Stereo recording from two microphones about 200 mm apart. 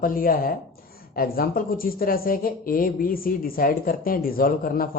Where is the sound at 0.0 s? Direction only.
45° left (ahead or behind).